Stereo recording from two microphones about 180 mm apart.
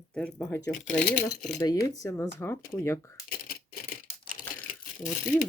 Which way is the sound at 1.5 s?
20° left (ahead or behind).